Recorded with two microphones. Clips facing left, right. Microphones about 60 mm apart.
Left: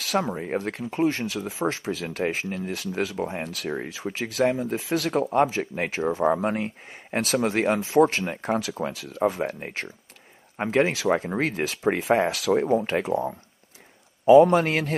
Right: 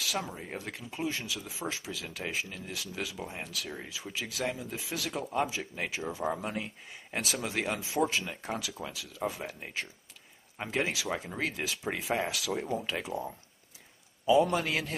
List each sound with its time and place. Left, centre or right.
0.0 s speech: left